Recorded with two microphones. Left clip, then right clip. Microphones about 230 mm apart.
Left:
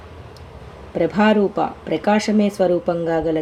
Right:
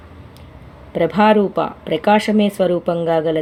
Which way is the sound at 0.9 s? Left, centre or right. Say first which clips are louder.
Right 3 dB; right.